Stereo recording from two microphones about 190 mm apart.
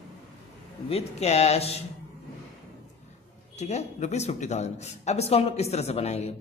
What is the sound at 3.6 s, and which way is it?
A man's voice, 35° left (ahead or behind).